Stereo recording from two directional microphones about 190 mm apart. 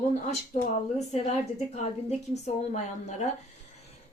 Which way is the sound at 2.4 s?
35° left (ahead or behind).